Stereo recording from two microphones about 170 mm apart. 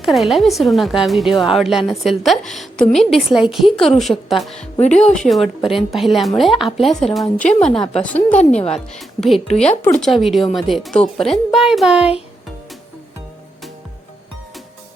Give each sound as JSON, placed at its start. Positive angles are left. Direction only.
{"t": 0.0, "sound": "a woman's voice", "side_deg": 0}
{"t": 8.4, "sound": "a woman's voice", "side_deg": 40}
{"t": 8.7, "sound": "a woman's voice", "side_deg": 0}